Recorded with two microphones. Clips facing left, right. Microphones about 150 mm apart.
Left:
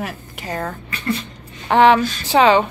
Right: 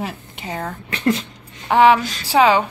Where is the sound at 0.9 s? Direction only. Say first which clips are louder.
Right 6 dB; 90° right.